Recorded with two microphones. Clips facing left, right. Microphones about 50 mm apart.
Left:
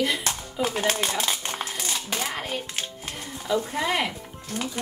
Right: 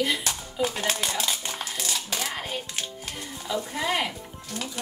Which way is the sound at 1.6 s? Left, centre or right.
Centre.